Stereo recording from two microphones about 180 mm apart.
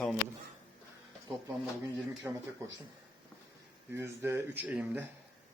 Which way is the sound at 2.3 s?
10° right (ahead or behind).